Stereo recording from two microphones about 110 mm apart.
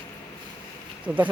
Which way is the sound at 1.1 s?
15° right (ahead or behind).